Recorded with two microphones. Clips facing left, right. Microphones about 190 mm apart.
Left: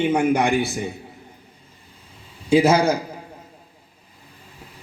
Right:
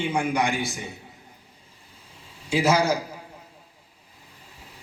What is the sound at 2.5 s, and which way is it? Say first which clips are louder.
Speech: left 6 dB; 55° left (ahead or behind).